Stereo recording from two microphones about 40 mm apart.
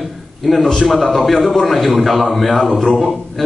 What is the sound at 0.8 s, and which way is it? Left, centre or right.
A man's voice, centre.